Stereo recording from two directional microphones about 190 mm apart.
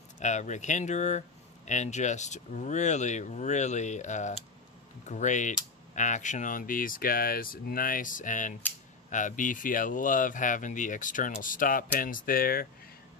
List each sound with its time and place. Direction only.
0.2 s speech: 40° left (ahead or behind)